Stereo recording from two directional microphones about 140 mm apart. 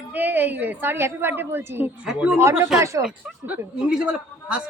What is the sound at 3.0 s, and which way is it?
Speech, 5° right (ahead or behind).